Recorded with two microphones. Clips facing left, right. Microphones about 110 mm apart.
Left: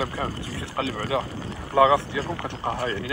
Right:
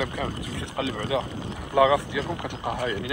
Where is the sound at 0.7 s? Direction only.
35° left (ahead or behind).